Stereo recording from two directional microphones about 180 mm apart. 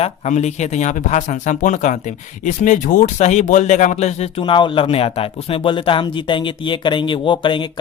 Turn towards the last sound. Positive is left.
turn(degrees=25)  # may be behind; listen again after turning